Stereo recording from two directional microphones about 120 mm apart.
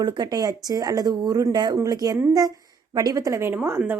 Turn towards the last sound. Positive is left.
turn(degrees=-20)  # may be behind; listen again after turning